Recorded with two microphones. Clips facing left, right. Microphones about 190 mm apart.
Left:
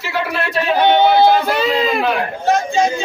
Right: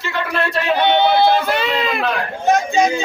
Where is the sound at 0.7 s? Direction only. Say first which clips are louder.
Left 3 dB; 40° left (ahead or behind).